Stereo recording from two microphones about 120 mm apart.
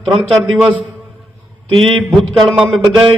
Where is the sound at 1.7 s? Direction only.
5° left (ahead or behind).